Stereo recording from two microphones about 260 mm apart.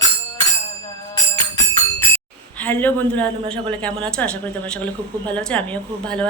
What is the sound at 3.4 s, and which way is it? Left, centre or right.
Speech, centre.